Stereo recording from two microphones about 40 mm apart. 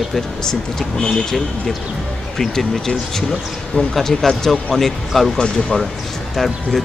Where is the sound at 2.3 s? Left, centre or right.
Centre.